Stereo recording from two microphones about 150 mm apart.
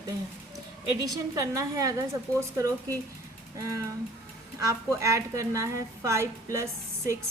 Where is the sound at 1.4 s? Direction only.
20° right (ahead or behind).